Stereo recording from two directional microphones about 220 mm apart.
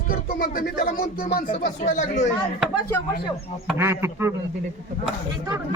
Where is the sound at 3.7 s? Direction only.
10° right (ahead or behind).